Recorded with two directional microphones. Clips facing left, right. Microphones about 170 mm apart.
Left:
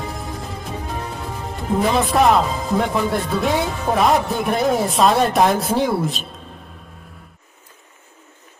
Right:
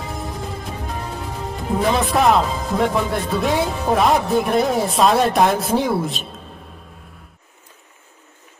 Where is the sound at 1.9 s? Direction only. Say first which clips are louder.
Even; centre (ahead or behind).